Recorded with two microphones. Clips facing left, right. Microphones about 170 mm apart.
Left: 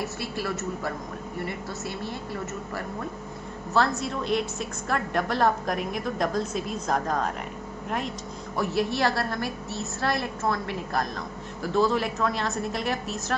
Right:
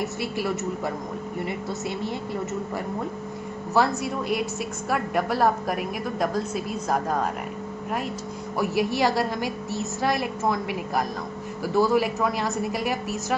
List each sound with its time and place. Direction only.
0.0 s a woman's voice: 15° right (ahead or behind)
3.7 s a woman's voice: 10° right (ahead or behind)
8.5 s a woman's voice: 10° right (ahead or behind)